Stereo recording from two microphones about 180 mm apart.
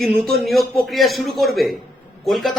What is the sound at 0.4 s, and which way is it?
A man's voice, centre (ahead or behind).